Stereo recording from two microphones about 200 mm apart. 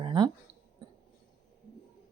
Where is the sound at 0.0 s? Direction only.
25° right (ahead or behind).